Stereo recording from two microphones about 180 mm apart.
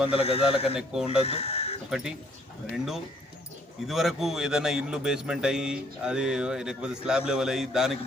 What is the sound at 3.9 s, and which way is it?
A man's voice, centre (ahead or behind).